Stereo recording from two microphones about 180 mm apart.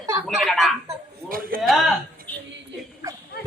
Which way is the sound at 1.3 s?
55° right (ahead or behind).